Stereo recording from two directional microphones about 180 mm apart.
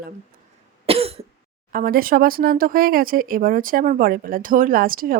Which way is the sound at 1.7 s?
50° right (ahead or behind).